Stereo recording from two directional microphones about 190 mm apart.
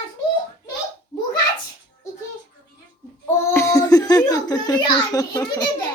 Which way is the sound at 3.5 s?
15° left (ahead or behind).